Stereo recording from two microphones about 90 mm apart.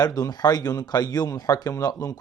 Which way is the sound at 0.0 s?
45° left (ahead or behind).